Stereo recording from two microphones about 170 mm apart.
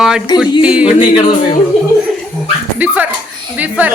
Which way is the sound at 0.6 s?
5° right (ahead or behind).